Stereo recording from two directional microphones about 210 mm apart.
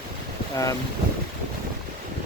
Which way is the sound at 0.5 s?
15° left (ahead or behind).